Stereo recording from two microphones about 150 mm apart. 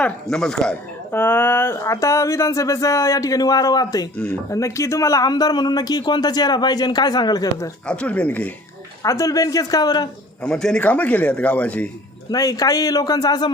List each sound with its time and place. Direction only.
0.0 s speech: 5° left (ahead or behind); by 7.7 s 25° left (ahead or behind)
7.9 s a man's voice: 10° left (ahead or behind)
9.0 s speech: 20° left (ahead or behind)
10.4 s a man's voice: 5° left (ahead or behind)
12.3 s speech: 25° left (ahead or behind)